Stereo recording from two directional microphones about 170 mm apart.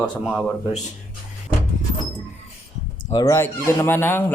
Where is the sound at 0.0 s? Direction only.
5° left (ahead or behind).